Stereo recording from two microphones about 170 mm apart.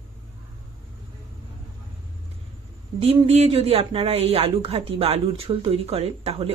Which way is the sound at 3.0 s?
35° right (ahead or behind).